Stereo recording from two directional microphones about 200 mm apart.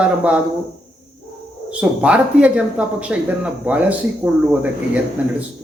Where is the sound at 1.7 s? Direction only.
5° right (ahead or behind).